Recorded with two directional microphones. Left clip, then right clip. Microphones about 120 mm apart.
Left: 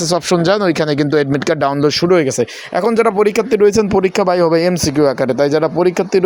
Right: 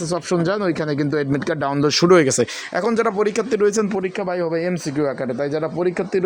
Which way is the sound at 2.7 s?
35° left (ahead or behind).